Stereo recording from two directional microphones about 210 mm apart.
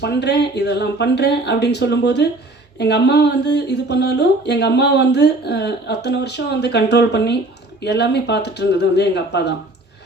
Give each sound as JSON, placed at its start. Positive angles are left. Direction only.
{"t": 0.0, "sound": "speech", "side_deg": 50}